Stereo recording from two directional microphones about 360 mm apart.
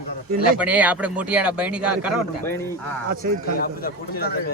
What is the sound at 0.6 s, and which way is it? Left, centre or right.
Speech, centre.